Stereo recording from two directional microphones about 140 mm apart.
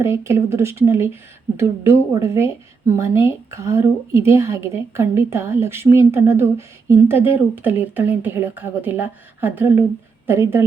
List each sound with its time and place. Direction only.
0.0 s speech: 20° right (ahead or behind)